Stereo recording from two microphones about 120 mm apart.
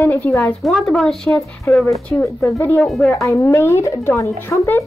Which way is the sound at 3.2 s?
25° left (ahead or behind).